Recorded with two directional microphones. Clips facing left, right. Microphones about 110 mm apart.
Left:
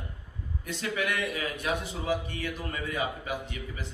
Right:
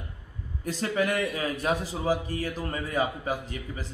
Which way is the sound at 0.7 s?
35° right (ahead or behind).